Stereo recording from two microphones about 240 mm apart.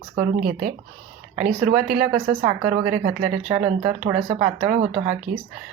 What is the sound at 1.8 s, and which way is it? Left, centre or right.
Speech, right.